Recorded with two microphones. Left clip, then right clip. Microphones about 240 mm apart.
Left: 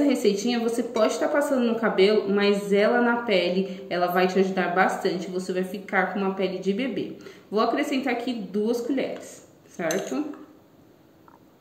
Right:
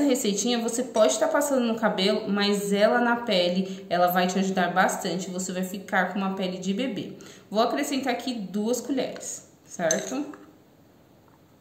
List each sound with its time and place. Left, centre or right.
0.1 s a woman's voice: right